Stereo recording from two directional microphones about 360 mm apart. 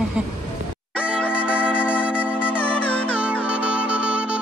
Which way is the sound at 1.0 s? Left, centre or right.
Centre.